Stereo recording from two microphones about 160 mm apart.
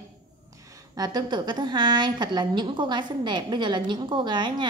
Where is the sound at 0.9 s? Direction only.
25° right (ahead or behind).